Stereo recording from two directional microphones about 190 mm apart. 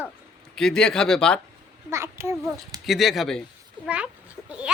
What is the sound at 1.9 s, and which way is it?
Speech, 15° right (ahead or behind).